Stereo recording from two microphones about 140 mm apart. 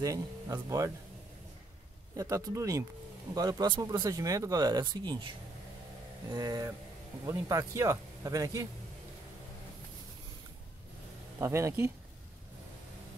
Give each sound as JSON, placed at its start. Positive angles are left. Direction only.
{"t": 0.0, "sound": "speech", "side_deg": -25}
{"t": 2.1, "sound": "speech", "side_deg": -25}
{"t": 6.3, "sound": "speech", "side_deg": -25}
{"t": 11.3, "sound": "speech", "side_deg": -20}